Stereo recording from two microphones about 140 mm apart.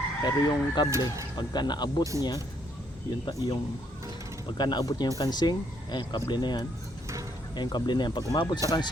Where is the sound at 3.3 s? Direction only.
30° left (ahead or behind).